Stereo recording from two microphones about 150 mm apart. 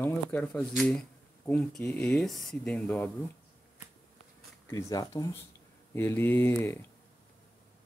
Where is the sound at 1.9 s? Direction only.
5° left (ahead or behind).